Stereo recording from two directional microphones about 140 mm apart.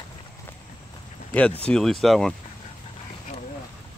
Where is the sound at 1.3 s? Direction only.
10° left (ahead or behind).